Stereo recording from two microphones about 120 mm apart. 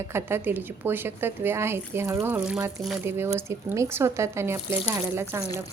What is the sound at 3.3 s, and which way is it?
Speech, 25° right (ahead or behind).